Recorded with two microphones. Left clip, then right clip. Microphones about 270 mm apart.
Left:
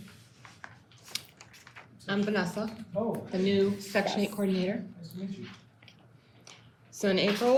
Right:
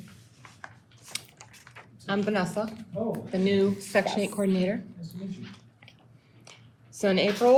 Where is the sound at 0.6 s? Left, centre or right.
Right.